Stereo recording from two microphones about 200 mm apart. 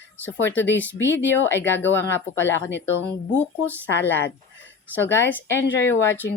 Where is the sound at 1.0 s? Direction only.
65° left (ahead or behind).